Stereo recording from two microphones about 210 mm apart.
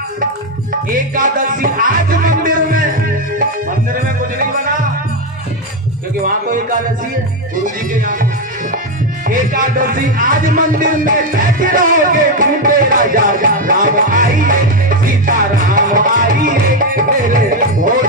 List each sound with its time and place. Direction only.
1.1 s music: 40° right (ahead or behind)
6.2 s music: 40° right (ahead or behind)
7.9 s music: 40° right (ahead or behind)
9.3 s speech: 40° right (ahead or behind)
15.2 s music: 40° right (ahead or behind)